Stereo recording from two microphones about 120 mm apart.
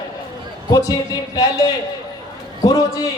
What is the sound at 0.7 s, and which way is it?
Speech, 30° left (ahead or behind).